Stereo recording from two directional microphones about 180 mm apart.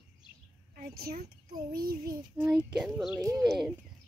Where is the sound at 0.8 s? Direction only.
55° right (ahead or behind).